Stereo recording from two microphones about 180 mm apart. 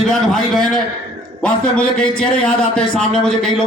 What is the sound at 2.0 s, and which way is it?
A man's voice, 5° left (ahead or behind).